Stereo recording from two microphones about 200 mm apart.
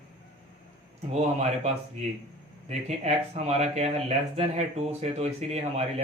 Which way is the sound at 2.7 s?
30° right (ahead or behind).